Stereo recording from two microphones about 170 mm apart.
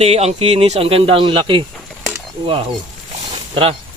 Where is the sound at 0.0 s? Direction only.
40° right (ahead or behind).